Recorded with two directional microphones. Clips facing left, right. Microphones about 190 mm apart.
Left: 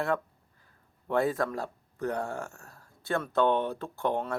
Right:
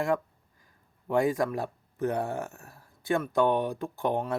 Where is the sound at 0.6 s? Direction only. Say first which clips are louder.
Right 3 dB; 15° right (ahead or behind).